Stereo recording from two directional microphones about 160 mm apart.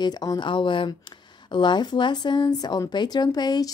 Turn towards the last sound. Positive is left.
turn(degrees=25)  # may be behind; listen again after turning